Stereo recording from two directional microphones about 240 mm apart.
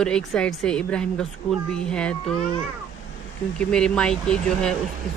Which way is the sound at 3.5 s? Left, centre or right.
Centre.